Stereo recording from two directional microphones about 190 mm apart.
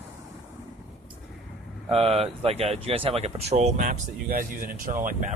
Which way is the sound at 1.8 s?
30° right (ahead or behind).